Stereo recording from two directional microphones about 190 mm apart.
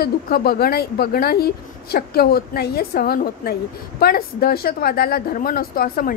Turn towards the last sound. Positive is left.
turn(degrees=50)  # may be behind; listen again after turning